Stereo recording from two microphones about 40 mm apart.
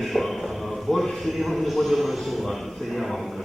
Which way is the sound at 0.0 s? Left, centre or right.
Centre.